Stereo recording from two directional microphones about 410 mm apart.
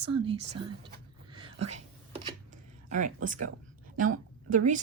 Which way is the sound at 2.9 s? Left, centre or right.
Centre.